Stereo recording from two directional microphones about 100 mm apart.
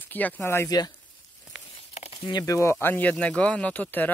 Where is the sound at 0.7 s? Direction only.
40° left (ahead or behind).